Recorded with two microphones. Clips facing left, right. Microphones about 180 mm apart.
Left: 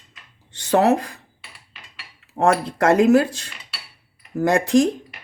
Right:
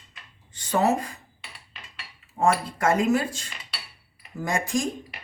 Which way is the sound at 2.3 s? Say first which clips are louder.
Left 4 dB; 70° left (ahead or behind).